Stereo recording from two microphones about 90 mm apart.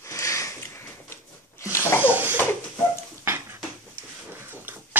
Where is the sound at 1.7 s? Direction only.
30° left (ahead or behind).